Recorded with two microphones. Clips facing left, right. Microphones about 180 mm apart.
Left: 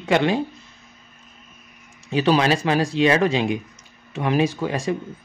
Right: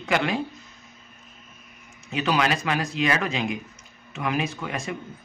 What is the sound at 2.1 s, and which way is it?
Speech, 30° left (ahead or behind).